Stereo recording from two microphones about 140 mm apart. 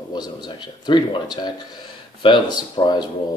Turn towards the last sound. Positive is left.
turn(degrees=30)  # may be behind; listen again after turning